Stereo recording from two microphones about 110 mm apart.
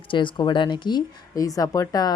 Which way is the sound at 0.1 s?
50° left (ahead or behind).